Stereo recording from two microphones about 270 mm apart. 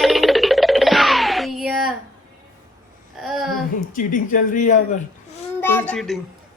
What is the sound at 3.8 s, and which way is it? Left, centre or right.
Speech, left.